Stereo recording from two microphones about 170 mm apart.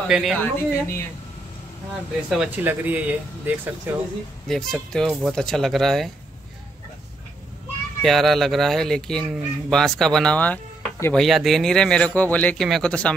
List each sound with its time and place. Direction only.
0.1 s speech: 5° right (ahead or behind)
0.4 s speech: 15° left (ahead or behind)
2.2 s speech: 5° right (ahead or behind)
8.0 s speech: centre (ahead or behind)
11.1 s speech: centre (ahead or behind)